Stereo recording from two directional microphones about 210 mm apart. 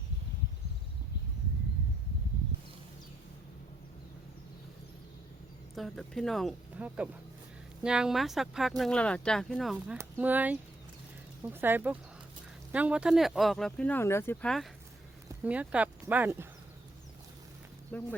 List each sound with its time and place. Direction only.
5.7 s speech: centre (ahead or behind)
17.9 s speech: 10° left (ahead or behind)